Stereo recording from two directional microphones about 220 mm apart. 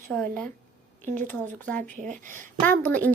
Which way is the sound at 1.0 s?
35° right (ahead or behind).